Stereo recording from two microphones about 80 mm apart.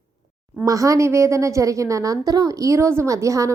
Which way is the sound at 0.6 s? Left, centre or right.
Right.